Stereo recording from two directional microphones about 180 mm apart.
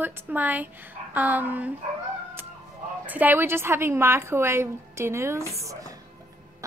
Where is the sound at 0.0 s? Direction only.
10° right (ahead or behind).